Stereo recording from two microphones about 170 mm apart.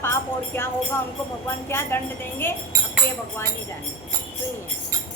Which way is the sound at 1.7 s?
15° left (ahead or behind).